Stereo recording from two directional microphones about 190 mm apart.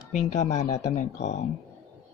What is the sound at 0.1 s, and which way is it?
Speech, 40° left (ahead or behind).